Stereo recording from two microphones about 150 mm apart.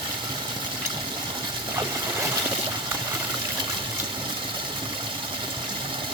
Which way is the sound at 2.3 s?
25° right (ahead or behind).